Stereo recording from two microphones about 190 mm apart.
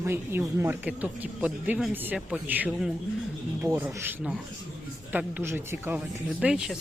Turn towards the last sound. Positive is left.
turn(degrees=-5)  # may be behind; listen again after turning